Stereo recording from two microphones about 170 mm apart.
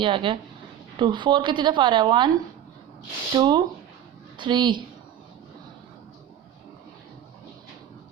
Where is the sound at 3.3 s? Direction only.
25° right (ahead or behind).